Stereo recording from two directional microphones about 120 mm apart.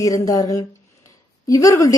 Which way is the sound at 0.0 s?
30° left (ahead or behind).